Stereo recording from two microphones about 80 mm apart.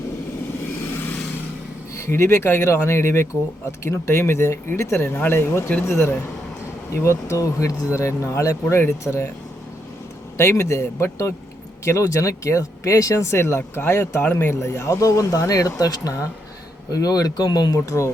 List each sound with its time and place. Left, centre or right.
2.0 s speech: left
10.3 s speech: left